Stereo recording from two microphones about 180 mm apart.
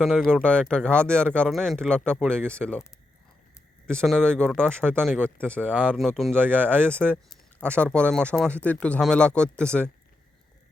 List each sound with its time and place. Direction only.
0.0 s speech: centre (ahead or behind)
3.8 s speech: 5° left (ahead or behind)